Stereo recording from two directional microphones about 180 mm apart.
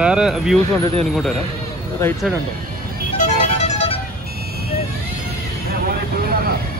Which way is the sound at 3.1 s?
40° left (ahead or behind).